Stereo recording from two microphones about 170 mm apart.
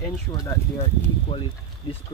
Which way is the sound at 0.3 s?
20° left (ahead or behind).